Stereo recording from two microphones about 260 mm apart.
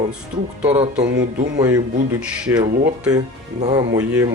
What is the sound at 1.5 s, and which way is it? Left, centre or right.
Speech, centre.